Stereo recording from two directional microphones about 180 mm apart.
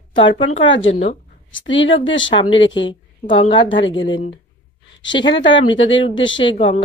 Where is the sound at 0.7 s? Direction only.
90° left.